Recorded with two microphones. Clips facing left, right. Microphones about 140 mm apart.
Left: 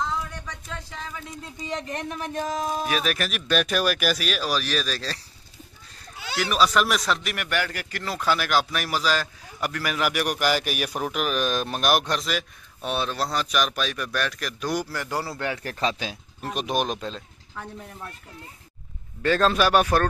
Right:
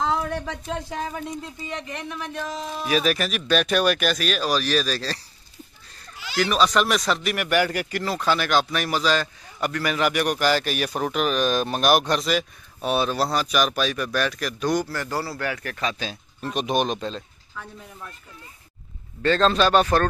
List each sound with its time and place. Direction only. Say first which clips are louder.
0.0 s a sound: right 5 dB; 70° right (ahead or behind); by 1.2 s 50° right (ahead or behind)
1.7 s speech: left 3 dB; 45° left (ahead or behind)
2.9 s speech: right 4 dB; centre (ahead or behind)
6.3 s speech: right 2 dB; 5° left (ahead or behind)
7.4 s a man's voice: right 7 dB; 15° right (ahead or behind)
8.0 s speech: even; centre (ahead or behind); by 16.0 s 30° left (ahead or behind)
16.5 s speech: right 3 dB; 5° left (ahead or behind)
19.2 s speech: right 1 dB; 10° left (ahead or behind)